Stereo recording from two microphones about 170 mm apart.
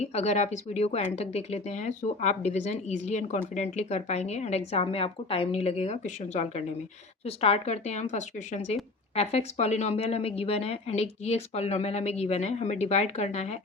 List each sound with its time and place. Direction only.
0.0 s speech: 40° left (ahead or behind)